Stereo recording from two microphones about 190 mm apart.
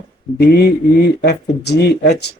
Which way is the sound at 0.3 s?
55° left (ahead or behind).